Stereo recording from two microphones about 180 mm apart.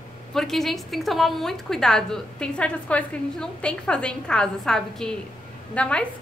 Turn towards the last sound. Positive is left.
turn(degrees=5)  # may be behind; listen again after turning